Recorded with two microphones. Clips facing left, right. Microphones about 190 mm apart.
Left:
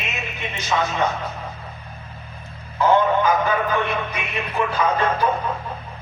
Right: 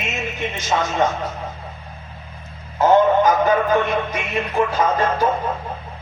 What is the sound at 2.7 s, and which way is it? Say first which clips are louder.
A man's voice: right 3 dB; 45° right (ahead or behind).